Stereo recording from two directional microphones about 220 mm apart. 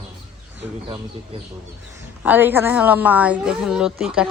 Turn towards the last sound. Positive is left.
turn(degrees=-5)  # may be behind; listen again after turning